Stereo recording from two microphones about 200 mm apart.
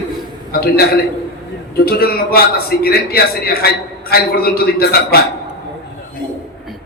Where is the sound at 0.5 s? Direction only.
50° left (ahead or behind).